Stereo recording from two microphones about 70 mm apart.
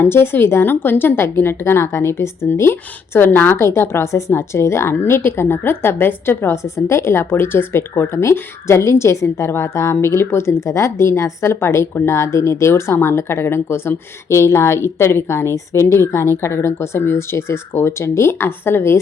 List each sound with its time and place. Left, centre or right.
0.0 s a woman's voice: left